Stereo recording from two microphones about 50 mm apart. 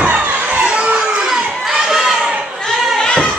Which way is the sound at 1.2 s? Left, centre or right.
Centre.